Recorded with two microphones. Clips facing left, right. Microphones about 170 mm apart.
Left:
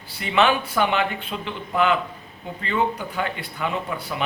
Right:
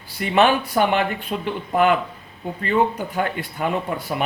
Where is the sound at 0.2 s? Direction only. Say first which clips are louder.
Right 3 dB; 45° right (ahead or behind).